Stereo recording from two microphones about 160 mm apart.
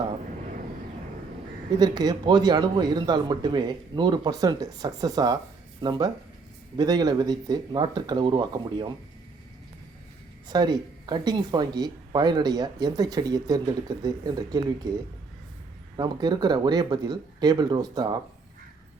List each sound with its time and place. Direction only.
1.8 s speech: 25° right (ahead or behind)
10.5 s speech: 25° right (ahead or behind)